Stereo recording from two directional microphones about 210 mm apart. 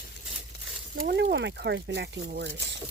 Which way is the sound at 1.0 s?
55° right (ahead or behind).